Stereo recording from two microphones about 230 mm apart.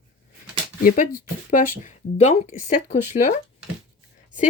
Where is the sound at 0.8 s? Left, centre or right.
Left.